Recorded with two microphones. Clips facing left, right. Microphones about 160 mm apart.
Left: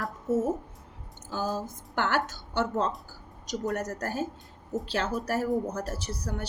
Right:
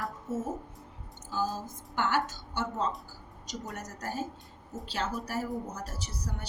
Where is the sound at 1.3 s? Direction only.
65° left (ahead or behind).